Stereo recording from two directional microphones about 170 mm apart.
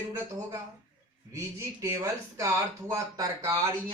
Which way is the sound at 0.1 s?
20° right (ahead or behind).